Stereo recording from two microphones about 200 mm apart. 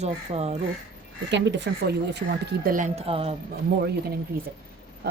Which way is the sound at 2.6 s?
40° right (ahead or behind).